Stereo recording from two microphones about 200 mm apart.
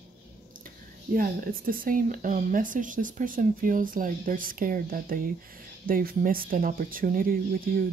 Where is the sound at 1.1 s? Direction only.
45° right (ahead or behind).